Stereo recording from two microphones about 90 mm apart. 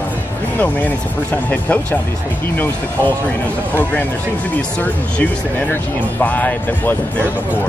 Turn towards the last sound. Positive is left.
turn(degrees=20)  # may be behind; listen again after turning